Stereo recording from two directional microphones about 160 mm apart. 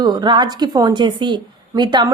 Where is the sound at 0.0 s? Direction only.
25° right (ahead or behind).